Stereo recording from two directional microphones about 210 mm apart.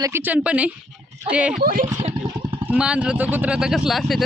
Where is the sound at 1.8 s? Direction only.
30° right (ahead or behind).